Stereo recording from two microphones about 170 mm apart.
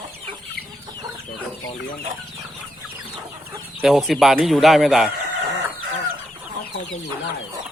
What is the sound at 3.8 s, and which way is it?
A man's voice, 5° right (ahead or behind).